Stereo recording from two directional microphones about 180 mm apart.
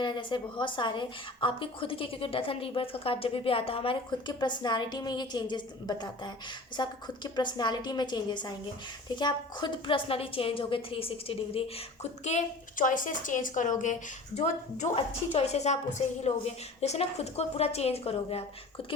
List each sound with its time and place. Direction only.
0.0 s a woman's voice: 25° left (ahead or behind)